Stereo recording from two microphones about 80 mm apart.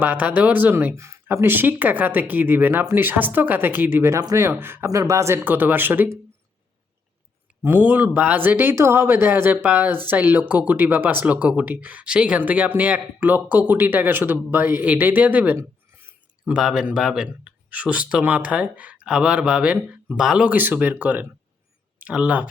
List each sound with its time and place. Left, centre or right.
0.0 s speech: right
0.9 s speech: right
4.9 s speech: right
5.5 s speech: right
7.8 s speech: centre
16.6 s speech: centre
20.1 s speech: centre